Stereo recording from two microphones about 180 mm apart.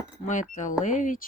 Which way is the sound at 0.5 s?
45° left (ahead or behind).